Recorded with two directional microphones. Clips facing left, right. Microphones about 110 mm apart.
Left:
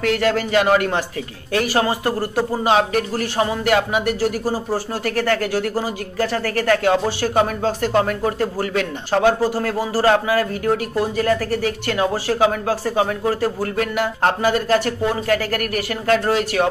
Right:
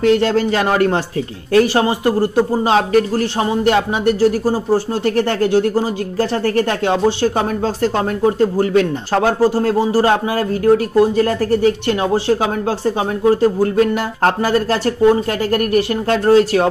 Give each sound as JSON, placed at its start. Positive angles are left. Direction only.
{"t": 0.0, "sound": "speech", "side_deg": -25}